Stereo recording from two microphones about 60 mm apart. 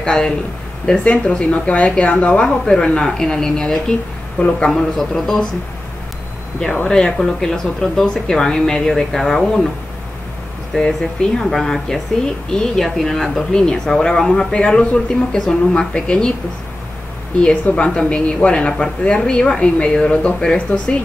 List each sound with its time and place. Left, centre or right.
0.0 s a man's voice: centre
6.9 s speech: centre
10.7 s speech: centre
17.7 s speech: centre